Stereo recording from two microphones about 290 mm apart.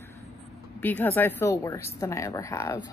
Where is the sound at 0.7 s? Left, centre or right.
Centre.